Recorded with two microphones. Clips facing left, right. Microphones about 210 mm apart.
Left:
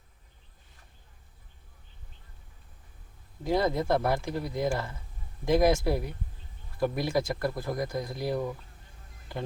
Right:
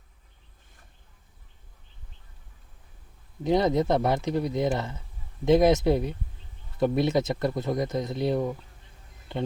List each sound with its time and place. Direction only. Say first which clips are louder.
3.4 s speech: right 4 dB; 20° right (ahead or behind)